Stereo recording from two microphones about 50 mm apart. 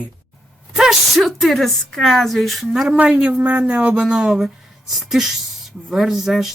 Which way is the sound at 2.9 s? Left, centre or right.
Right.